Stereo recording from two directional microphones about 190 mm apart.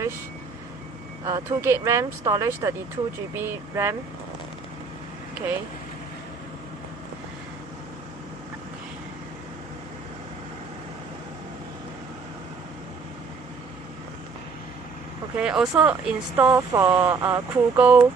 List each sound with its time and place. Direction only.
1.2 s speech: 15° right (ahead or behind)
15.4 s speech: 5° right (ahead or behind)